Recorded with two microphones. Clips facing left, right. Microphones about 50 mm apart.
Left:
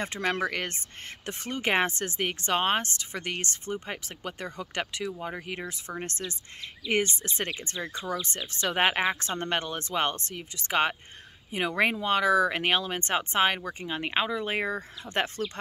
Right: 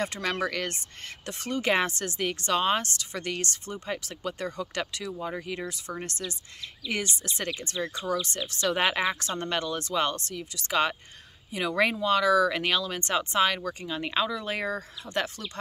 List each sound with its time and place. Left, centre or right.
0.0 s speech: left
13.8 s speech: left